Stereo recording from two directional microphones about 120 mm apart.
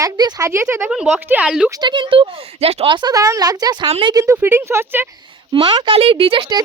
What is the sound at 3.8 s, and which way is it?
Speech, 55° right (ahead or behind).